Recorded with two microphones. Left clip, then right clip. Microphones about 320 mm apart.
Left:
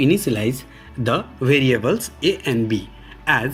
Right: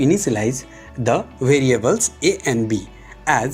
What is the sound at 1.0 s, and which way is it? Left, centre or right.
Speech, right.